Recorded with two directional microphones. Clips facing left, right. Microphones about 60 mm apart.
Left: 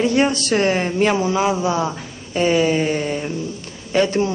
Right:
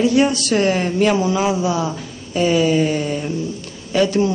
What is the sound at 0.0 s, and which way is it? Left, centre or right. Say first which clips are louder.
A woman's voice: right 2 dB; left.